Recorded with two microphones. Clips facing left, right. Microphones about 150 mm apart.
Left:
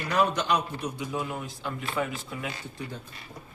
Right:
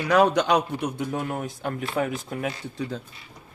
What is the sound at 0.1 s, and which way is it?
Speech, 85° right.